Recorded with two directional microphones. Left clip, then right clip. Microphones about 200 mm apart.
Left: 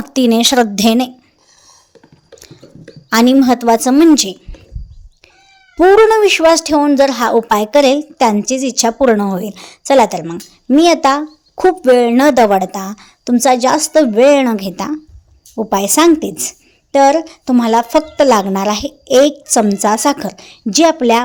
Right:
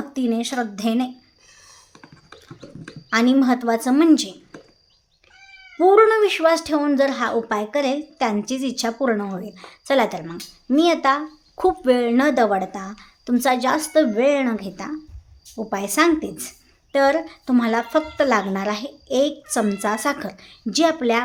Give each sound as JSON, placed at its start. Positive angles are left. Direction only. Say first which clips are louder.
{"t": 0.1, "sound": "a woman's voice", "louder": "left 14 dB", "side_deg": 50}
{"t": 3.1, "sound": "a woman's voice", "louder": "left 8 dB", "side_deg": 45}
{"t": 5.7, "sound": "a woman's voice", "louder": "left 7 dB", "side_deg": 35}